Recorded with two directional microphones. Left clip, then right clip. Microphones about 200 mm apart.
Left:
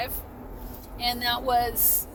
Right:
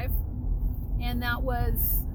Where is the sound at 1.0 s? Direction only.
10° right (ahead or behind).